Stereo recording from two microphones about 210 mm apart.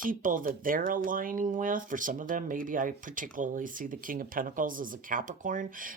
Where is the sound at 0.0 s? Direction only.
40° right (ahead or behind).